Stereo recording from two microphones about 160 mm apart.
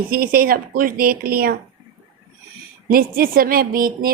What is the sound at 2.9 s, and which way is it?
A woman's voice, 65° right (ahead or behind).